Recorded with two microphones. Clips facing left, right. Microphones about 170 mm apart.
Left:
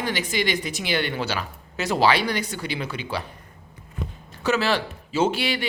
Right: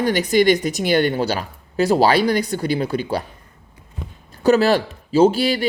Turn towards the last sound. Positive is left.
turn(degrees=-35)  # may be behind; listen again after turning